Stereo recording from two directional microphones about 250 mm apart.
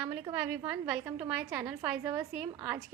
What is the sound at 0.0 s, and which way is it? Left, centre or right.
A woman's voice, centre.